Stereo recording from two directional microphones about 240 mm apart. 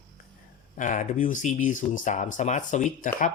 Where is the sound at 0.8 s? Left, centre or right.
Left.